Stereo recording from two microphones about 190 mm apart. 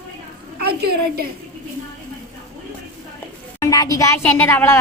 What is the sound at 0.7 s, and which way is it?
Speech, 50° right (ahead or behind).